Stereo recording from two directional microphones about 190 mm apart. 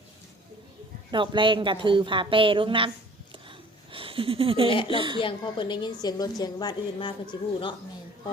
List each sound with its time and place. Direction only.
1.1 s a woman's voice: 25° right (ahead or behind)
3.9 s speech: 30° right (ahead or behind)
4.7 s a woman's voice: 25° left (ahead or behind)
4.9 s a woman's voice: 25° right (ahead or behind)
5.2 s a woman's voice: 25° left (ahead or behind)